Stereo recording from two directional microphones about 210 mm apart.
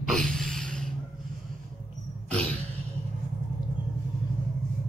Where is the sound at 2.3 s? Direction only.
5° left (ahead or behind).